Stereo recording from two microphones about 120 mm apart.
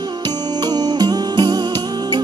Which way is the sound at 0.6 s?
35° right (ahead or behind).